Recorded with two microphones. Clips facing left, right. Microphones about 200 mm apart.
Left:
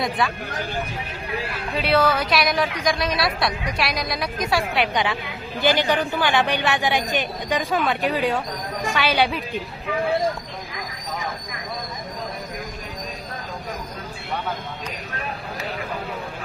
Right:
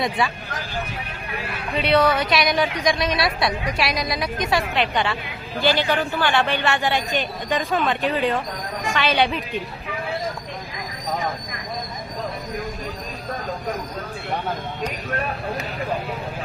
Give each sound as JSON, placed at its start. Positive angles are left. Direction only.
{"t": 0.2, "sound": "a woman's voice", "side_deg": 0}
{"t": 1.7, "sound": "a woman's voice", "side_deg": 0}
{"t": 7.6, "sound": "a woman's voice", "side_deg": 0}
{"t": 8.0, "sound": "a man's voice", "side_deg": 10}